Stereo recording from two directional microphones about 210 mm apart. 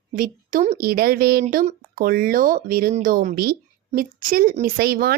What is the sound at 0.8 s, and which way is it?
Speech, 45° right (ahead or behind).